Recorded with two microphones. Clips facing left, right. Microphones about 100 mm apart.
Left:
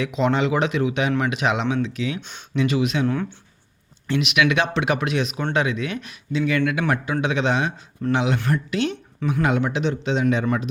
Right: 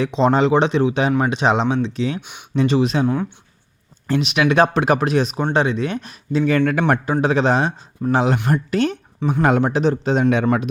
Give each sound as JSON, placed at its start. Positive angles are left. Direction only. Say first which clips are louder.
{"t": 0.0, "sound": "speech", "louder": "right 5 dB", "side_deg": -35}
{"t": 3.1, "sound": "speech", "louder": "right 3 dB", "side_deg": -15}
{"t": 4.0, "sound": "a man's voice", "louder": "right 2 dB", "side_deg": -35}